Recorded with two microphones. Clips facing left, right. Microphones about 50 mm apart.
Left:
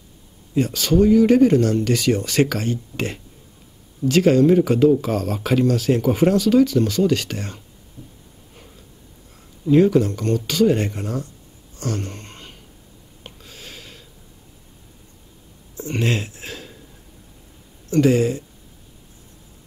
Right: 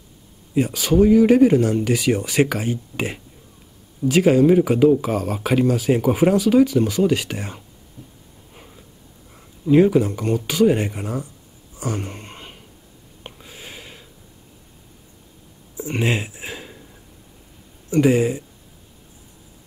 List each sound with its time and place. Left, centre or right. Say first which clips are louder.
0.6 s speech: right 1 dB; centre
8.5 s a sound: right 2 dB; centre
9.7 s speech: even; centre
11.7 s a sound: even; centre
15.8 s speech: right 1 dB; centre
17.8 s speech: even; centre